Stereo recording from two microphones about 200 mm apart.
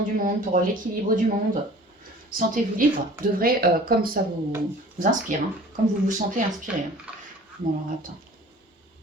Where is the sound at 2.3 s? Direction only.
40° right (ahead or behind).